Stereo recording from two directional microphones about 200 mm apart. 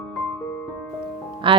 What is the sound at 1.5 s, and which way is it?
Speech, 25° right (ahead or behind).